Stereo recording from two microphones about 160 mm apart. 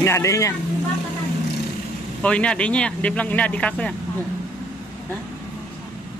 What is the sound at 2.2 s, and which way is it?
Speech, 5° left (ahead or behind).